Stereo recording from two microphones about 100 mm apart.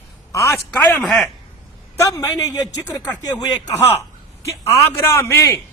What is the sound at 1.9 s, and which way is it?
A man's voice, 35° left (ahead or behind).